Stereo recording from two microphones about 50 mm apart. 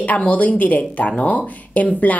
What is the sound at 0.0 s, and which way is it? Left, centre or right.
A woman's voice, left.